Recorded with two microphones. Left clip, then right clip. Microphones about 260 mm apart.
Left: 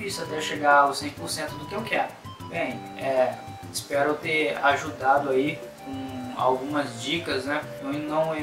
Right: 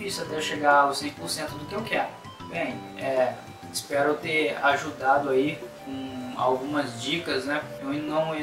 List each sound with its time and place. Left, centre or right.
0.0 s speech: centre